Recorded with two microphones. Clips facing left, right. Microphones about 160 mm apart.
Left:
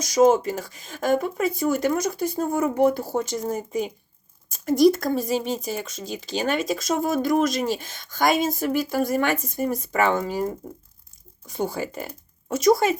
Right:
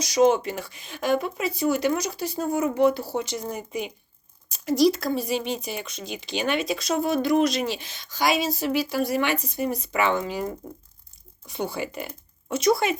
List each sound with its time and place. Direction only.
0.0 s speech: 45° left (ahead or behind)
11.4 s speech: 45° left (ahead or behind)